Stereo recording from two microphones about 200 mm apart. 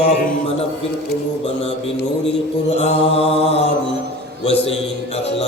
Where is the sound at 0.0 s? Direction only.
35° left (ahead or behind).